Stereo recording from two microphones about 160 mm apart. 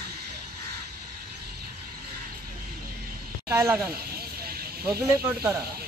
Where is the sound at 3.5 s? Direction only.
15° right (ahead or behind).